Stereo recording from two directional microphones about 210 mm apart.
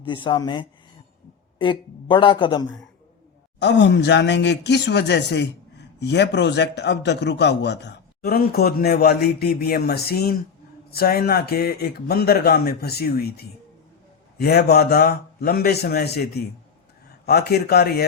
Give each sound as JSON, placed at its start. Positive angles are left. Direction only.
{"t": 0.0, "sound": "a man's voice", "side_deg": 25}
{"t": 3.6, "sound": "a man's voice", "side_deg": 55}